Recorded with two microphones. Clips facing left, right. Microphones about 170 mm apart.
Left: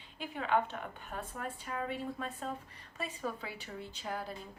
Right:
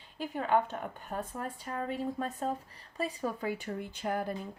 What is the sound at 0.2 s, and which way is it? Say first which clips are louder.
A woman's voice: right 3 dB; 45° right (ahead or behind).